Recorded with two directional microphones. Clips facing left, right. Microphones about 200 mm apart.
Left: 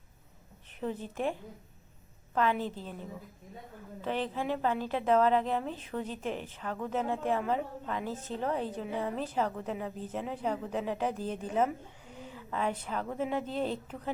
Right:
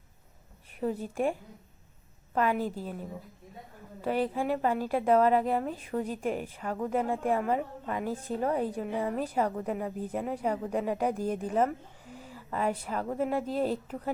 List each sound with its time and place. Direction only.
0.8 s a woman's voice: 10° right (ahead or behind)